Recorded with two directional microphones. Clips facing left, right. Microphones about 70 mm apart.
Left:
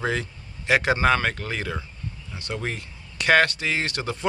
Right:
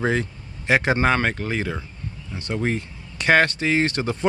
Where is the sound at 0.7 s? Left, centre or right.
Right.